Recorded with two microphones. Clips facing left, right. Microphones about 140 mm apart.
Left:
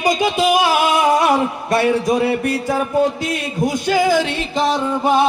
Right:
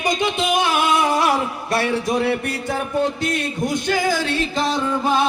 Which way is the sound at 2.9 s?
5° left (ahead or behind).